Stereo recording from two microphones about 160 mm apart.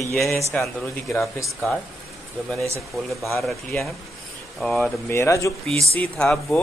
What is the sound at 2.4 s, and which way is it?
Speech, centre (ahead or behind).